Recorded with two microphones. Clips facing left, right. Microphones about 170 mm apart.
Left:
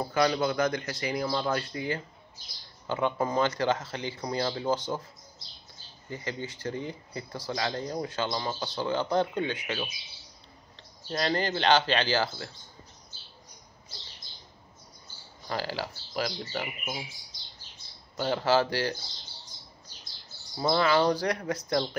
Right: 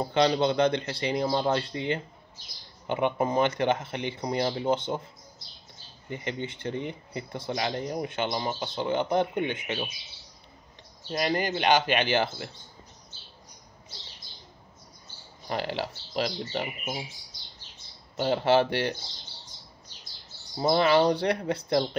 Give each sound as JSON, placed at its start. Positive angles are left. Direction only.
{"t": 0.0, "sound": "speech", "side_deg": -25}
{"t": 6.0, "sound": "speech", "side_deg": -20}
{"t": 11.1, "sound": "speech", "side_deg": -15}
{"t": 15.4, "sound": "speech", "side_deg": -20}
{"t": 18.1, "sound": "speech", "side_deg": -25}
{"t": 20.5, "sound": "speech", "side_deg": -20}